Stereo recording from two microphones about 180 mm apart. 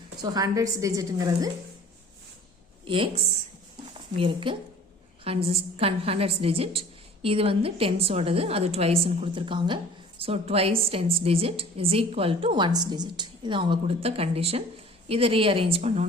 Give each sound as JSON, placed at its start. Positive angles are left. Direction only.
{"t": 0.2, "sound": "a woman's voice", "side_deg": -20}
{"t": 2.8, "sound": "speech", "side_deg": -30}
{"t": 4.1, "sound": "a woman's voice", "side_deg": -30}